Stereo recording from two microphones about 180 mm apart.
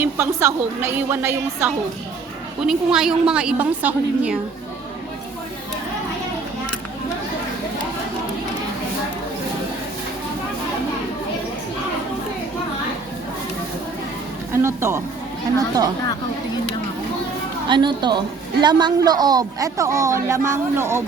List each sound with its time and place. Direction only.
0.0 s a woman's voice: 15° right (ahead or behind)
14.5 s a woman's voice: 15° right (ahead or behind)
17.7 s a woman's voice: 25° right (ahead or behind)